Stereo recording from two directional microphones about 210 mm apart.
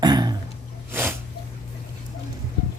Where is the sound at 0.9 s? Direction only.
10° right (ahead or behind).